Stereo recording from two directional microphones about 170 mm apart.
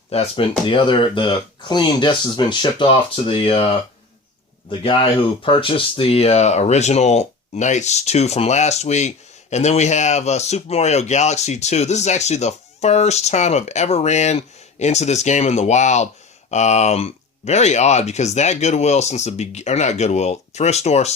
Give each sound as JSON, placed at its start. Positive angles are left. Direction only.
{"t": 0.1, "sound": "speech", "side_deg": 35}
{"t": 4.8, "sound": "speech", "side_deg": 30}